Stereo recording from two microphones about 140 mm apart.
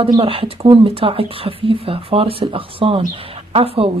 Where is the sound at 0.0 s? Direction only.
40° right (ahead or behind).